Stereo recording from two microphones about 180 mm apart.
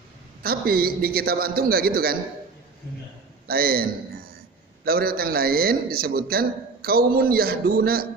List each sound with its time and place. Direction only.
0.4 s a man's voice: 55° right (ahead or behind)
3.4 s a man's voice: 55° right (ahead or behind)
4.9 s a man's voice: 55° right (ahead or behind)